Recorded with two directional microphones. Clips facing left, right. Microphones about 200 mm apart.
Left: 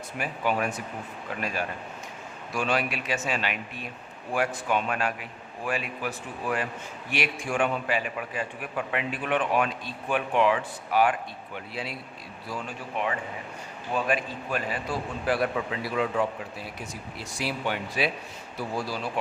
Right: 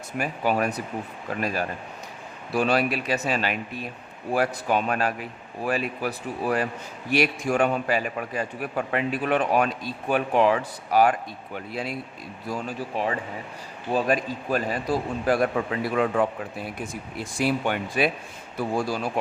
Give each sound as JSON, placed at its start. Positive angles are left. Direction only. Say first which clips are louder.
{"t": 0.2, "sound": "a man's voice", "louder": "right 3 dB", "side_deg": -40}